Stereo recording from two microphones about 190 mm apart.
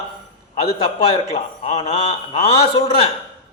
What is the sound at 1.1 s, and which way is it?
A man's voice, 30° left (ahead or behind).